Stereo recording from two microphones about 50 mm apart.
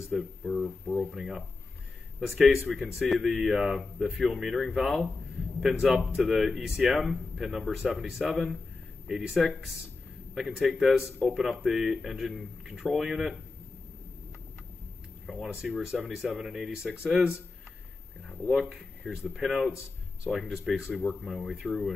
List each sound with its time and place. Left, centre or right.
0.1 s speech: centre
0.7 s a sound: centre
1.1 s speech: centre
5.9 s speech: right
6.2 s speech: centre
15.2 s speech: centre
19.0 s speech: centre
20.5 s speech: centre
21.0 s speech: left
21.4 s speech: centre